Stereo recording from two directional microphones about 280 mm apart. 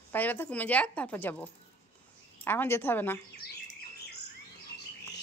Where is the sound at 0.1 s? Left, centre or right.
Centre.